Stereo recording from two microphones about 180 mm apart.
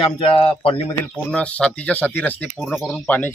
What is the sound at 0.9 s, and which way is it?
Speech, 5° left (ahead or behind).